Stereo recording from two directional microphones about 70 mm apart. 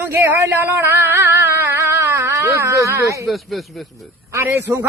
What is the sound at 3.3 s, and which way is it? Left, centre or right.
Speech, centre.